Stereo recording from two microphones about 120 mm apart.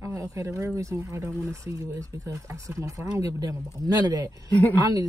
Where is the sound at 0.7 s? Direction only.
25° right (ahead or behind).